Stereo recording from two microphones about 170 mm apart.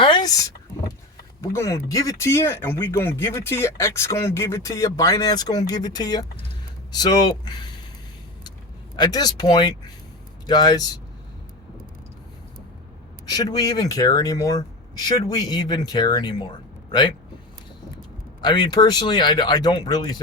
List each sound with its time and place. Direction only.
0.0 s vehicle: 25° left (ahead or behind)
1.4 s speech: 15° left (ahead or behind)
9.0 s speech: 25° left (ahead or behind)
13.3 s speech: 20° left (ahead or behind)
18.4 s speech: 25° left (ahead or behind)